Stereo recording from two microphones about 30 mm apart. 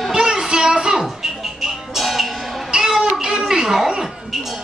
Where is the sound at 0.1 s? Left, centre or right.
Right.